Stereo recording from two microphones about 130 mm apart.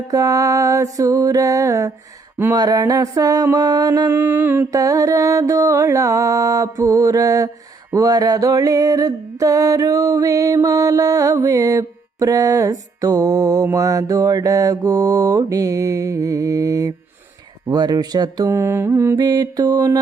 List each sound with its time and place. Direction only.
0.1 s music: 25° right (ahead or behind)
4.1 s mantra: 15° right (ahead or behind)
4.7 s music: 25° right (ahead or behind)